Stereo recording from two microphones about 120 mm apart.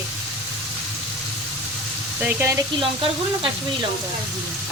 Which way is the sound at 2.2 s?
15° right (ahead or behind).